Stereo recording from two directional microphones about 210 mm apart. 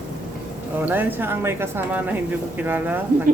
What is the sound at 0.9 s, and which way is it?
Speech, 10° right (ahead or behind).